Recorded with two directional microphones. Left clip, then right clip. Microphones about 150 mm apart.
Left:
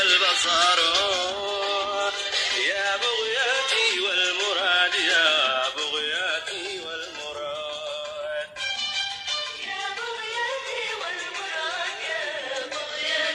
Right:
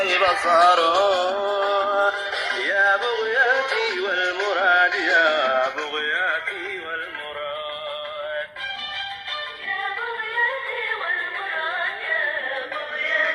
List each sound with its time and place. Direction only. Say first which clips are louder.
0.0 s music: right 1 dB; 45° right (ahead or behind)
10.3 s music: right 6 dB; 25° right (ahead or behind)